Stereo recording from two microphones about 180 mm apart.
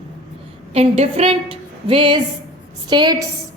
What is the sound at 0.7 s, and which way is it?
A woman's voice, 35° right (ahead or behind).